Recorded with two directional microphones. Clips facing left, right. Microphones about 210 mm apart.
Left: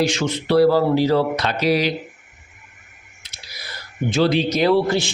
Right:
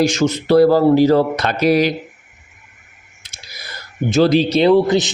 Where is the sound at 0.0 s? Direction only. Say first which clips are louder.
Right 5 dB; 40° right (ahead or behind).